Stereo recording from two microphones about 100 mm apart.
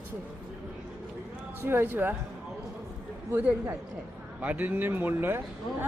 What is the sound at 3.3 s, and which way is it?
Speech, 15° right (ahead or behind).